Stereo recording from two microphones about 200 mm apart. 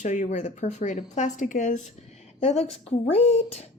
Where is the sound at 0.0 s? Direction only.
40° left (ahead or behind).